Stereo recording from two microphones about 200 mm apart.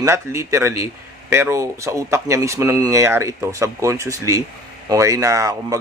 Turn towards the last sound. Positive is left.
turn(degrees=-15)  # may be behind; listen again after turning